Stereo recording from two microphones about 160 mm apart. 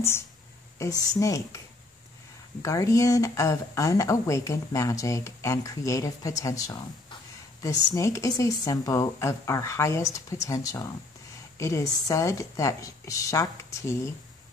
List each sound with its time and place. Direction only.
0.7 s speech: 20° left (ahead or behind)
2.6 s speech: 20° left (ahead or behind)